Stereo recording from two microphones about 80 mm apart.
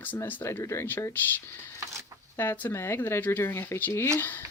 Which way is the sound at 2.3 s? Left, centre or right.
Left.